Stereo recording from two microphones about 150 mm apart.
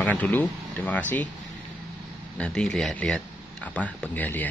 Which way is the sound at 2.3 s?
5° left (ahead or behind).